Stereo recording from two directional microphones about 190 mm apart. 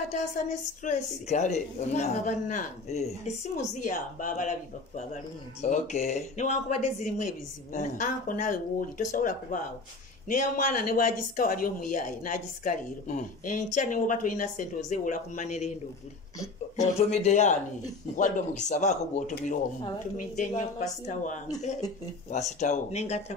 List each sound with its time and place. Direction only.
0.1 s a man's voice: 40° left (ahead or behind)
16.8 s a man's voice: 35° left (ahead or behind)